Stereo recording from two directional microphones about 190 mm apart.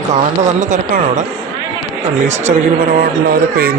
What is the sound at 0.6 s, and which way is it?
Speech, 45° right (ahead or behind).